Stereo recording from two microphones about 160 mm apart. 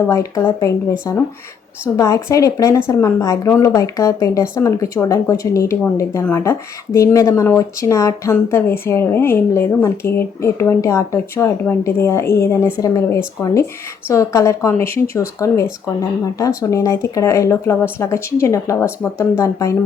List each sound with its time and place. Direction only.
0.1 s speech: 20° left (ahead or behind)